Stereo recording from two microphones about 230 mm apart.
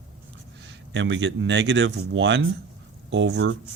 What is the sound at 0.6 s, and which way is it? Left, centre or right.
Speech, right.